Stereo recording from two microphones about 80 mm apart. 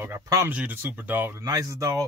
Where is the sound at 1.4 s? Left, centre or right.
Right.